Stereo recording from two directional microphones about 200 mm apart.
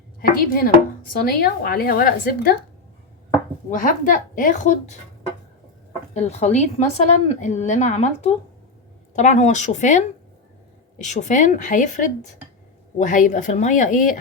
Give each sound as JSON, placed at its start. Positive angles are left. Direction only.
{"t": 0.2, "sound": "a woman's voice", "side_deg": 45}
{"t": 3.7, "sound": "a woman's voice", "side_deg": 40}
{"t": 6.1, "sound": "a woman's voice", "side_deg": 35}